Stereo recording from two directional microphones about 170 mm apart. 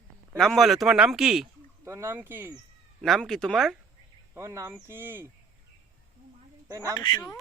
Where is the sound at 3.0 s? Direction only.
Centre (ahead or behind).